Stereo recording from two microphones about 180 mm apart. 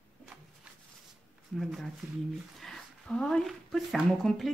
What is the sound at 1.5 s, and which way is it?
Speech, centre (ahead or behind).